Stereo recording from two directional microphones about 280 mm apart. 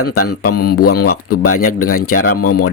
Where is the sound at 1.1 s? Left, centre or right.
Left.